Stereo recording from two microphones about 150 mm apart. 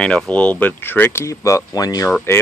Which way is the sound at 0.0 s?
5° left (ahead or behind).